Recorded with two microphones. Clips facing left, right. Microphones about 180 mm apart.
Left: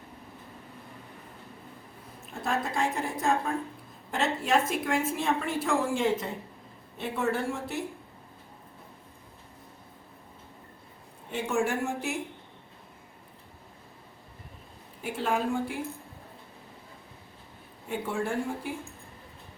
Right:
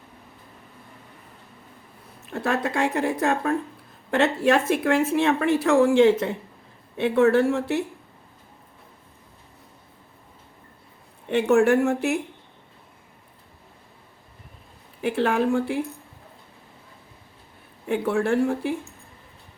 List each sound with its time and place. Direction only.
2.3 s a woman's voice: 70° right (ahead or behind)
11.3 s a woman's voice: 70° right (ahead or behind)
15.0 s a woman's voice: 75° right (ahead or behind)
17.8 s a woman's voice: 75° right (ahead or behind)